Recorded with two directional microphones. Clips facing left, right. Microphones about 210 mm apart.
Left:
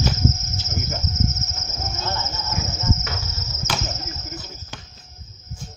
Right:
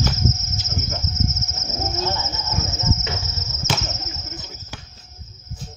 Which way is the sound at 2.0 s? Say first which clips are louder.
Right 2 dB; 10° right (ahead or behind).